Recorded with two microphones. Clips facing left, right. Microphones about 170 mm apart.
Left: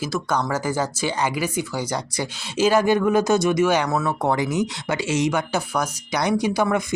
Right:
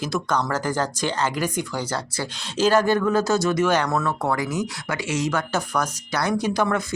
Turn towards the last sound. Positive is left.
turn(degrees=10)  # may be behind; listen again after turning